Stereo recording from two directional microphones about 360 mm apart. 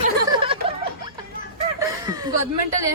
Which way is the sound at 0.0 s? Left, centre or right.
Centre.